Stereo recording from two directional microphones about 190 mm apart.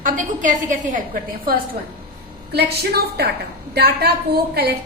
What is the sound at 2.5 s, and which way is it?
A woman's voice, 60° right (ahead or behind).